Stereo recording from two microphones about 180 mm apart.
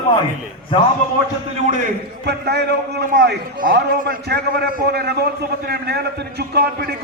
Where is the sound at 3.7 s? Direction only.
65° right (ahead or behind).